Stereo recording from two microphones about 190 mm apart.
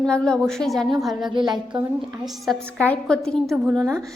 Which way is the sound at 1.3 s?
25° right (ahead or behind).